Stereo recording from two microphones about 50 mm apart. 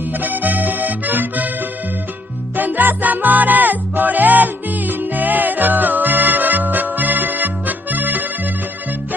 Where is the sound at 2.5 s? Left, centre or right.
Right.